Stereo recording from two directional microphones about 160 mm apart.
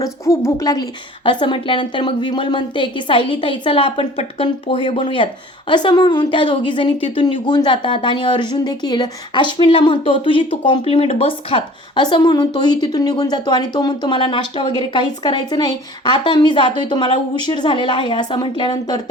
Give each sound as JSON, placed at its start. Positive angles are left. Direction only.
{"t": 0.0, "sound": "a woman's voice", "side_deg": 20}